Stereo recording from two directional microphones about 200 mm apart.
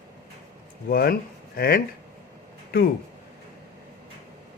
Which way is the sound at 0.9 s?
50° left (ahead or behind).